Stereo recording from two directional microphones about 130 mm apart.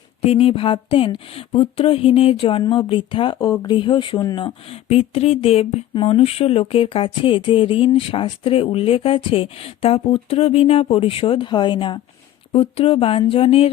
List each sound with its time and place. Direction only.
0.2 s speech: 50° left (ahead or behind)
3.3 s speech: 30° left (ahead or behind)
4.9 s speech: 55° left (ahead or behind); by 11.9 s 35° left (ahead or behind)
12.5 s speech: 45° left (ahead or behind)